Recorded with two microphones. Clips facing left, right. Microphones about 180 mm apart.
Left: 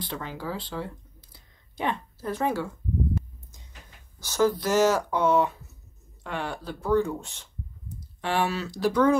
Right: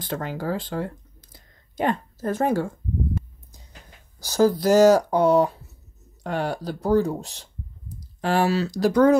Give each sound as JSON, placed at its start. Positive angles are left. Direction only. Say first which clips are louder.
{"t": 0.0, "sound": "speech", "louder": "right 6 dB", "side_deg": -45}
{"t": 4.2, "sound": "speech", "louder": "right 4 dB", "side_deg": -35}